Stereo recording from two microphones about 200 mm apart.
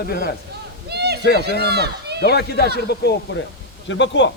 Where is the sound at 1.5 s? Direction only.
55° right (ahead or behind).